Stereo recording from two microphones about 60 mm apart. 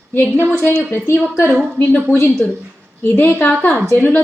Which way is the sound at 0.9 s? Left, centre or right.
Left.